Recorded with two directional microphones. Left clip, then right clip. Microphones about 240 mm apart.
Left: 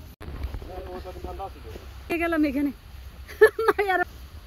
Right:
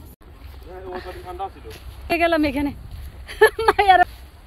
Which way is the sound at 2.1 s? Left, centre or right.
Centre.